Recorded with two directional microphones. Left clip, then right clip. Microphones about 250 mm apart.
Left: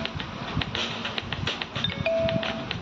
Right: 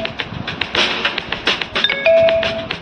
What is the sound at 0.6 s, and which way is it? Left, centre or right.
Music, right.